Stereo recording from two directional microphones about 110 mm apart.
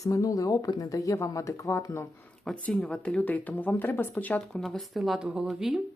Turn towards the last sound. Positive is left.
turn(degrees=-5)  # may be behind; listen again after turning